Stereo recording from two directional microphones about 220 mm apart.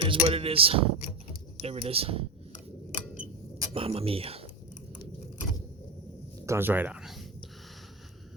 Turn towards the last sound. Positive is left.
turn(degrees=0)  # may be behind; listen again after turning